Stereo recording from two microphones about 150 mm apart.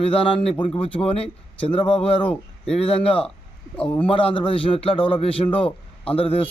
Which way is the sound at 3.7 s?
10° left (ahead or behind).